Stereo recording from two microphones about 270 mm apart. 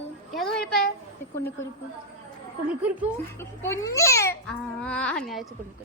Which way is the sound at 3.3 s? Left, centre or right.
Centre.